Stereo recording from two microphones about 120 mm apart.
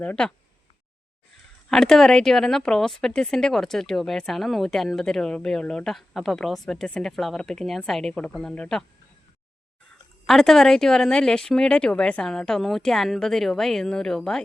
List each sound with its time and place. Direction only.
0.0 s speech: 10° left (ahead or behind)
1.7 s speech: 5° left (ahead or behind)
10.2 s speech: 5° left (ahead or behind)